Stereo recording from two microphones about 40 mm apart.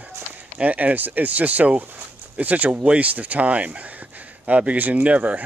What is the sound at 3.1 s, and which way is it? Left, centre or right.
Speech, right.